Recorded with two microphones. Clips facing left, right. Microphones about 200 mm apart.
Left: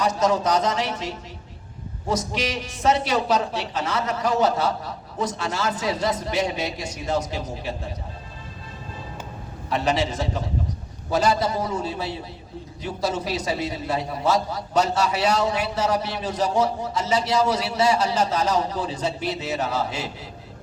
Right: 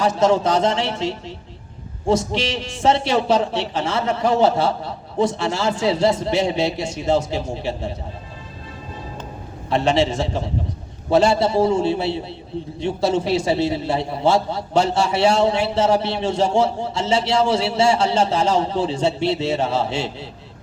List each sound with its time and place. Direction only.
0.0 s a man's voice: 25° right (ahead or behind)
9.6 s a man's voice: 25° right (ahead or behind)